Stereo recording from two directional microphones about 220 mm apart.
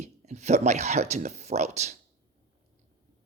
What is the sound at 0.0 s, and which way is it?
Speech, 30° right (ahead or behind).